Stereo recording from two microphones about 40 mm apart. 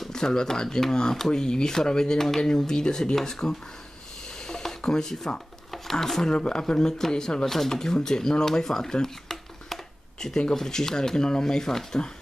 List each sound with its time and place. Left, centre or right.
0.1 s speech: centre
4.5 s a sound: centre
5.7 s speech: centre
6.2 s speech: left